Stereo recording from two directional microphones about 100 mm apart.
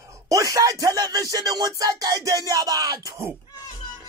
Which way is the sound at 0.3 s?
35° right (ahead or behind).